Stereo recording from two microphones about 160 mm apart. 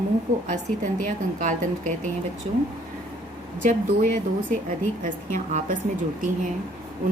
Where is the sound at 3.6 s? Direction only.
55° right (ahead or behind).